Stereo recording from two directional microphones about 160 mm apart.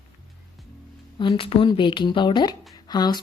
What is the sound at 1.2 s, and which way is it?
Speech, 30° left (ahead or behind).